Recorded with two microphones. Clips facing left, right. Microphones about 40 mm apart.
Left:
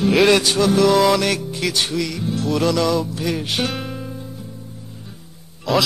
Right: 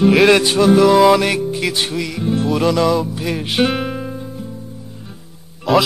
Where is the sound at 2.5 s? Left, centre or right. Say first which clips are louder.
Right 2 dB; centre.